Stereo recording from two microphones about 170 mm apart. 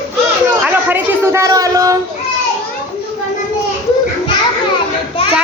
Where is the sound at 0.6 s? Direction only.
15° right (ahead or behind).